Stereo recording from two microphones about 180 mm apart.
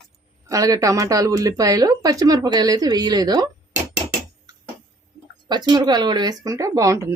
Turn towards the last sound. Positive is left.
turn(degrees=-15)  # may be behind; listen again after turning